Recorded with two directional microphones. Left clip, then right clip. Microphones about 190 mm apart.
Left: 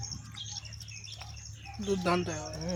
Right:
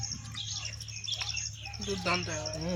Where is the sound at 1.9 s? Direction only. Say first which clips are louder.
Left 2 dB; 55° left (ahead or behind).